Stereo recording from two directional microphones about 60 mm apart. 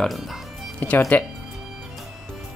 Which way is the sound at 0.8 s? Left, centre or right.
Left.